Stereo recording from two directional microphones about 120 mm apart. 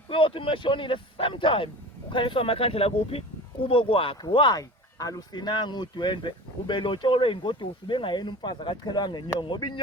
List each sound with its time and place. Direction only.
0.1 s speech: 45° left (ahead or behind)